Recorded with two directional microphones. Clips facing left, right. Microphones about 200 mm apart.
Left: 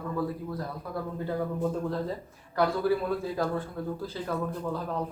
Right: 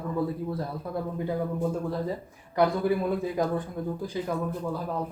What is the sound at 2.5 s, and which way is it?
Speech, 20° right (ahead or behind).